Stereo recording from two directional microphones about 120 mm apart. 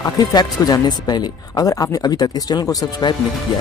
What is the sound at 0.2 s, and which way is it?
Speech, 35° left (ahead or behind).